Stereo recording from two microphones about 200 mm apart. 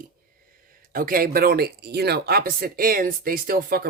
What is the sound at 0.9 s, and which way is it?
Speech, 45° right (ahead or behind).